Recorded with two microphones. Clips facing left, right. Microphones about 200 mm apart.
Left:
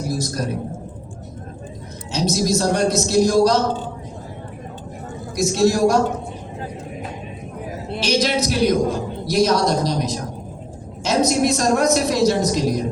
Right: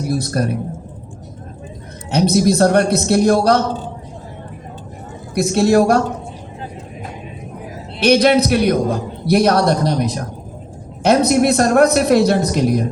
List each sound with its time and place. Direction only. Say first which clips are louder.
0.1 s a man's voice: right 6 dB; 60° right (ahead or behind)
2.0 s a man's voice: right 6 dB; 60° right (ahead or behind)
5.3 s a man's voice: right 4 dB; 60° right (ahead or behind)
7.9 s a man's voice: right 8 dB; 60° right (ahead or behind)